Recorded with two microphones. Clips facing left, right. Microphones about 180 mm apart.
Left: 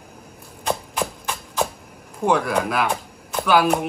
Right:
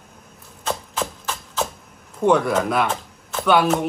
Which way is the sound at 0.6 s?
10° left (ahead or behind).